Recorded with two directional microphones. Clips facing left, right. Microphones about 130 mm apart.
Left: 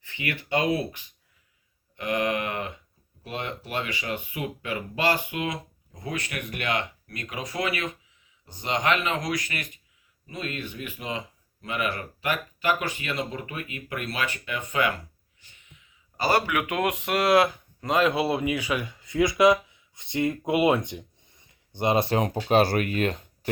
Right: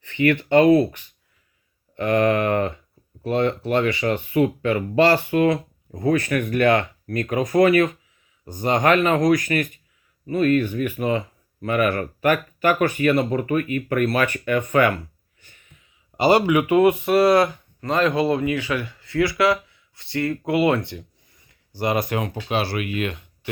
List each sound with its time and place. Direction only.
0.0 s speech: 55° right (ahead or behind)
2.0 s speech: 55° right (ahead or behind)
15.4 s a sound: 50° right (ahead or behind)
16.1 s speech: 25° right (ahead or behind)
16.5 s speech: 10° right (ahead or behind); by 23.5 s 40° left (ahead or behind)